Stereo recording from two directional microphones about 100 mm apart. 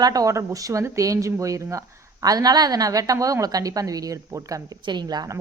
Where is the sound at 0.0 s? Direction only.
35° right (ahead or behind).